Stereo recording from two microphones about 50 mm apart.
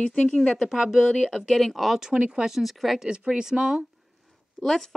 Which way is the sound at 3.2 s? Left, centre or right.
Centre.